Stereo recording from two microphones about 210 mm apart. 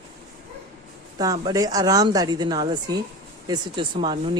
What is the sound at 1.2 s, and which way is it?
Speech, 15° right (ahead or behind).